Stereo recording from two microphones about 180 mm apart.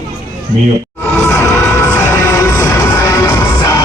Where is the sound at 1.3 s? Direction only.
15° left (ahead or behind).